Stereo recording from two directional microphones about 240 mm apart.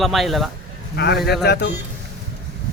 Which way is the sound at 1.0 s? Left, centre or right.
Left.